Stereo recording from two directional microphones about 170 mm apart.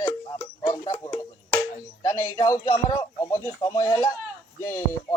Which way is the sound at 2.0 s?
20° left (ahead or behind).